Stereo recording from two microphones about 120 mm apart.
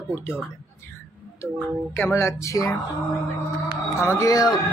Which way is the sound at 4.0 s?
25° left (ahead or behind).